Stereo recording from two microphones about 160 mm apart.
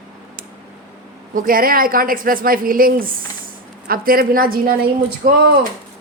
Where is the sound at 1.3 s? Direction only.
60° right (ahead or behind).